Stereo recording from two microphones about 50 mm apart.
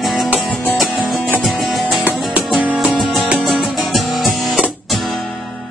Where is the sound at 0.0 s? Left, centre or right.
Centre.